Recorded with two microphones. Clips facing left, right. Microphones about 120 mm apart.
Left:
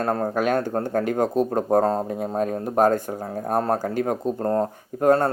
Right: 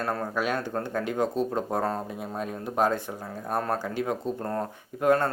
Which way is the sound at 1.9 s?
35° left (ahead or behind).